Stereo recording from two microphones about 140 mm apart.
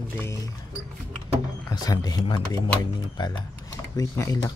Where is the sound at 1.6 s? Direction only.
25° left (ahead or behind).